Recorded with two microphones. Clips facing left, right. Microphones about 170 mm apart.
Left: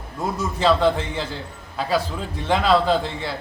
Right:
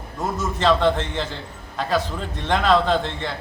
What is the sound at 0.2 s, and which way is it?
A man's voice, 10° left (ahead or behind).